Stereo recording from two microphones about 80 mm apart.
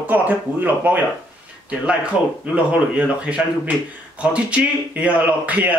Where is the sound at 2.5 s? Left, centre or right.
Centre.